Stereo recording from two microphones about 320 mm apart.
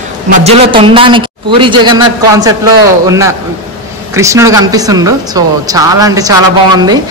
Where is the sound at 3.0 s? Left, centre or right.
Centre.